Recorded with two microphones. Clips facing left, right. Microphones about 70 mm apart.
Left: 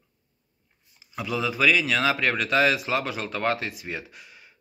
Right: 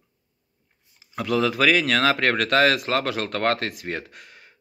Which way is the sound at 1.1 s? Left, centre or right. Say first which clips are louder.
Right 5 dB; right.